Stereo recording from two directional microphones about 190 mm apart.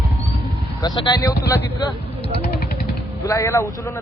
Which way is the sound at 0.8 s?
20° left (ahead or behind).